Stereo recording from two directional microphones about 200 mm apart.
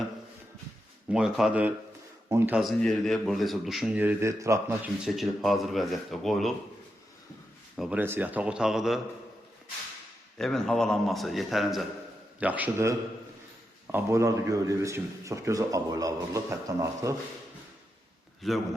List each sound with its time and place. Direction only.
1.1 s a man's voice: centre (ahead or behind)
5.0 s a man's voice: centre (ahead or behind)
7.8 s a man's voice: 5° right (ahead or behind)
10.3 s a man's voice: centre (ahead or behind); by 17.2 s 15° right (ahead or behind)
18.4 s a man's voice: centre (ahead or behind)